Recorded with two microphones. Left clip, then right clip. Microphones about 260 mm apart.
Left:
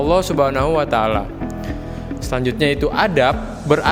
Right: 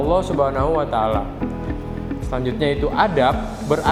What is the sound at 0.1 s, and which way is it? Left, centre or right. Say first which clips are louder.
Speech: left 3 dB; left.